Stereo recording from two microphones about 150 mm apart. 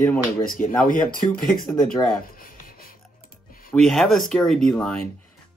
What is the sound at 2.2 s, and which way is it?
Writing, 75° left (ahead or behind).